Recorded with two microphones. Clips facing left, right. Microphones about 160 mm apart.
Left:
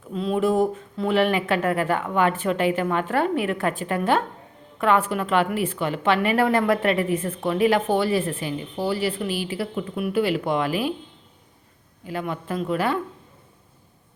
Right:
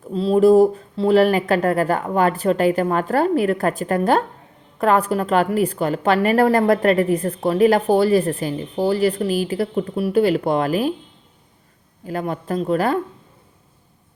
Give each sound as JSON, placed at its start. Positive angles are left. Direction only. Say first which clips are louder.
{"t": 0.1, "sound": "a woman's voice", "louder": "right 8 dB", "side_deg": -30}
{"t": 12.0, "sound": "a woman's voice", "louder": "right 4 dB", "side_deg": -40}